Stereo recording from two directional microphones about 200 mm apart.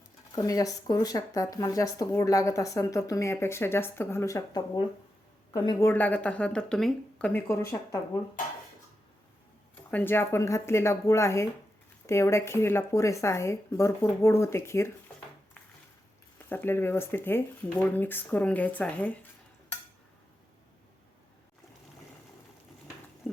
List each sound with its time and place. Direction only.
0.3 s speech: 20° left (ahead or behind)
9.9 s speech: 10° left (ahead or behind)
16.5 s speech: 10° left (ahead or behind)
23.2 s pig: centre (ahead or behind)